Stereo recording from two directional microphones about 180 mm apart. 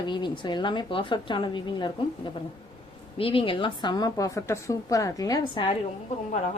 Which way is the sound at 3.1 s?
30° left (ahead or behind).